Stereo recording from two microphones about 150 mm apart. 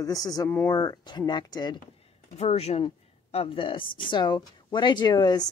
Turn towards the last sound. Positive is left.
turn(degrees=25)  # may be behind; listen again after turning